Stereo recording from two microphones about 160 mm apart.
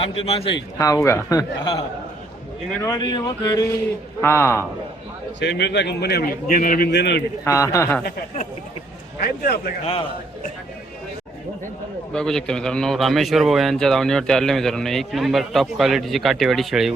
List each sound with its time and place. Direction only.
0.2 s speech: 35° left (ahead or behind)
0.8 s speech: 20° left (ahead or behind)
2.8 s a man's voice: 25° left (ahead or behind)
5.4 s a man's voice: 90° left
6.5 s a man's voice: 60° left (ahead or behind); by 7.2 s 90° left
7.4 s speech: 20° left (ahead or behind)
9.2 s a man's voice: 70° left (ahead or behind)
9.8 s speech: 35° left (ahead or behind)
12.1 s a man's voice: 5° left (ahead or behind)